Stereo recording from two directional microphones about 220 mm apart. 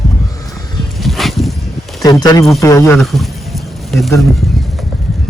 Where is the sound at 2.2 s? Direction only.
15° left (ahead or behind).